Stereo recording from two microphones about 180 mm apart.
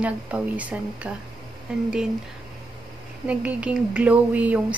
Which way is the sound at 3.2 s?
5° right (ahead or behind).